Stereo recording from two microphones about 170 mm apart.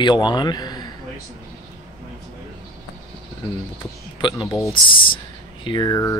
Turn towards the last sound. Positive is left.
turn(degrees=20)  # may be behind; listen again after turning